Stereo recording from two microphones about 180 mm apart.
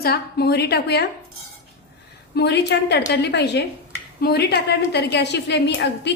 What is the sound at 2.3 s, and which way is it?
A woman's voice, 65° left (ahead or behind).